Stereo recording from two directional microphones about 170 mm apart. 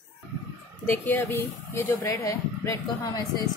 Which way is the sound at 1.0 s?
10° left (ahead or behind).